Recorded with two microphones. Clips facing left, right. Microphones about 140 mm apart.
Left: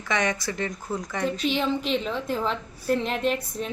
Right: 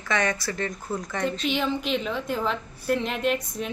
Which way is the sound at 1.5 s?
Centre (ahead or behind).